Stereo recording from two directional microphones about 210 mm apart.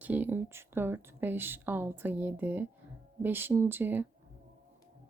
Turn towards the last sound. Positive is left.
turn(degrees=-10)  # may be behind; listen again after turning